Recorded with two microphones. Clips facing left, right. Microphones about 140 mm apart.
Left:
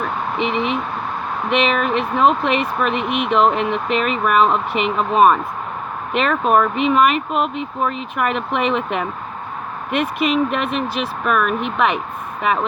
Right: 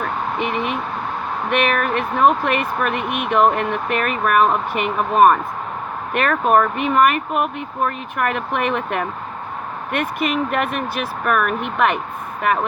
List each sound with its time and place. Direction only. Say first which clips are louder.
0.3 s speech: left 4 dB; 50° right (ahead or behind)